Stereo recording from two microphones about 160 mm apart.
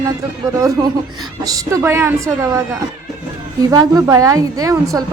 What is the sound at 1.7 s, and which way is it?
Speech, 15° right (ahead or behind).